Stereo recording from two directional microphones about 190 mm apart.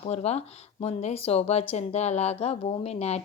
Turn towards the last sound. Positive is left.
turn(degrees=35)  # may be behind; listen again after turning